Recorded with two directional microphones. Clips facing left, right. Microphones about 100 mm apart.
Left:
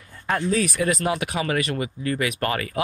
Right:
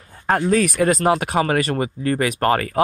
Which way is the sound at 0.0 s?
40° right (ahead or behind).